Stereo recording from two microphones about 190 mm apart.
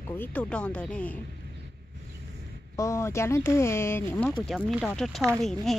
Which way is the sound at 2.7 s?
15° left (ahead or behind).